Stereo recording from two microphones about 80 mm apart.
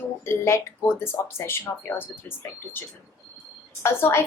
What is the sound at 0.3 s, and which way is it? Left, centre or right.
Speech, left.